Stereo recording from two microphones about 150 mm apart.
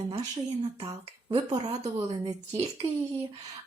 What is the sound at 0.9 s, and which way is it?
A woman's voice, 25° right (ahead or behind).